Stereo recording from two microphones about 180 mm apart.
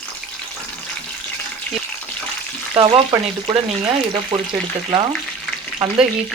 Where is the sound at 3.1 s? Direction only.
25° right (ahead or behind).